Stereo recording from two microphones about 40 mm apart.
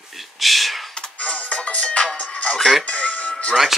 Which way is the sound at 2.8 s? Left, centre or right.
Left.